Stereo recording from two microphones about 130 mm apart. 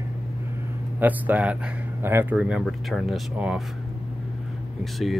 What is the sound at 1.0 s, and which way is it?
Speech, 10° right (ahead or behind).